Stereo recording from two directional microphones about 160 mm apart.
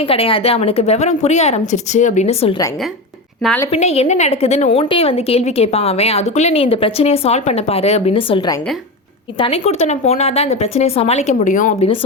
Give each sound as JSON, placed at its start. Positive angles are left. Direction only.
{"t": 0.0, "sound": "a woman's voice", "side_deg": 35}
{"t": 3.7, "sound": "a woman's voice", "side_deg": 40}